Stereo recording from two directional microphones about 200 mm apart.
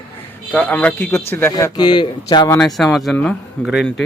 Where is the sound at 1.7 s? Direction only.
20° left (ahead or behind).